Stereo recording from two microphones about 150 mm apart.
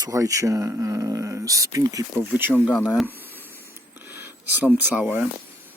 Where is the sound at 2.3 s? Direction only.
10° right (ahead or behind).